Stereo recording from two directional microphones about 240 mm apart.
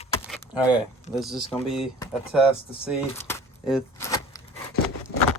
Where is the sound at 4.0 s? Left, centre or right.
Centre.